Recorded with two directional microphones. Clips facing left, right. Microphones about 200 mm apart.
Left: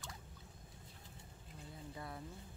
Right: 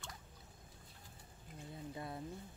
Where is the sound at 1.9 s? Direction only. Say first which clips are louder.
Right 2 dB; 25° right (ahead or behind).